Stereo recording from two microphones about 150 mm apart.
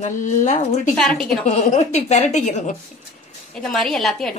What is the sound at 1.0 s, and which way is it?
Speech, 5° left (ahead or behind).